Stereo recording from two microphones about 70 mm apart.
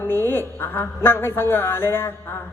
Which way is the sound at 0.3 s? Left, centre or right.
Left.